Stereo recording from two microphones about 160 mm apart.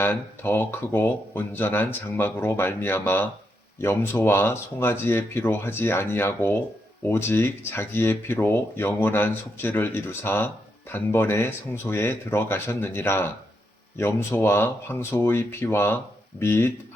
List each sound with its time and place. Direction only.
0.0 s speech: 15° left (ahead or behind)